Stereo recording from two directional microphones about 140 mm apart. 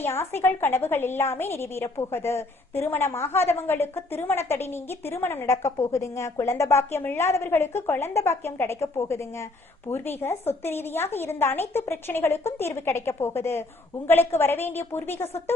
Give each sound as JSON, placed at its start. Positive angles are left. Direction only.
{"t": 0.0, "sound": "a woman's voice", "side_deg": 15}